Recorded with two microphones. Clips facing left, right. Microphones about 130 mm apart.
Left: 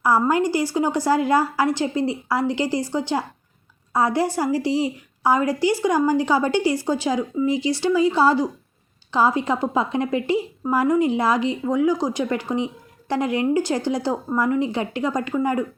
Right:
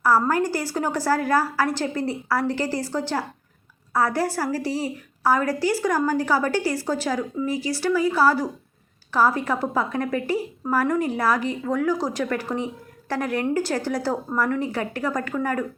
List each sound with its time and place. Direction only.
0.0 s a woman's voice: 20° left (ahead or behind)